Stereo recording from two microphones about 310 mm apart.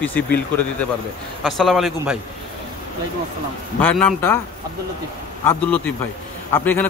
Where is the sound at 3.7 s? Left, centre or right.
Centre.